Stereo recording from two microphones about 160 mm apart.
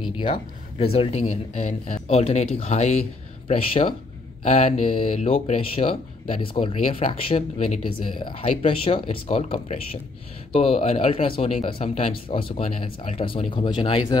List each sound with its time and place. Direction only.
0.2 s speech: 35° left (ahead or behind)